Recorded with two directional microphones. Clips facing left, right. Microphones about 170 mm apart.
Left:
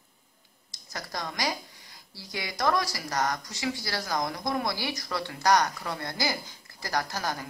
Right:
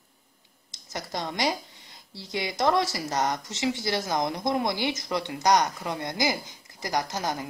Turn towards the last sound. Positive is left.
turn(degrees=-20)  # may be behind; listen again after turning